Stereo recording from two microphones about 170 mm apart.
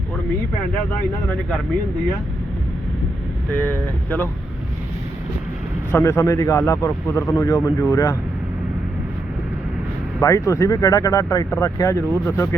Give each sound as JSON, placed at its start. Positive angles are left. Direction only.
{"t": 3.5, "sound": "speech", "side_deg": 10}
{"t": 6.0, "sound": "speech", "side_deg": 15}
{"t": 10.2, "sound": "speech", "side_deg": 20}